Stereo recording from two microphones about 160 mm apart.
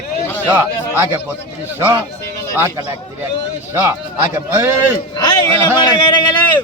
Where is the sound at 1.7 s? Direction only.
15° right (ahead or behind).